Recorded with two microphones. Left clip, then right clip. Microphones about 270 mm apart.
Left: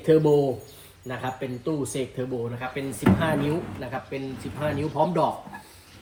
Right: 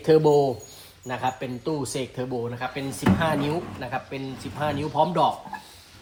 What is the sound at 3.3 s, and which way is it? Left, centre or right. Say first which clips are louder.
Speech: even; centre.